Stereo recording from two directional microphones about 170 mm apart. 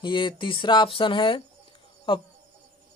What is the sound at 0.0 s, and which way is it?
Speech, 30° left (ahead or behind).